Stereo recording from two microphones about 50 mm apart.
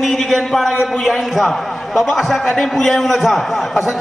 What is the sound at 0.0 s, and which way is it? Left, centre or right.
A man's voice, centre.